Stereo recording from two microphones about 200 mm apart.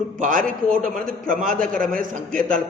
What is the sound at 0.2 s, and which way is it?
A man's voice, 40° right (ahead or behind).